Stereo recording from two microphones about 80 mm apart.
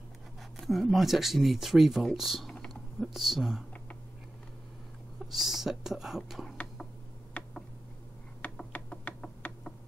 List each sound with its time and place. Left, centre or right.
0.6 s speech: centre
5.3 s speech: centre
7.3 s a sound: centre
8.4 s finger snapping: centre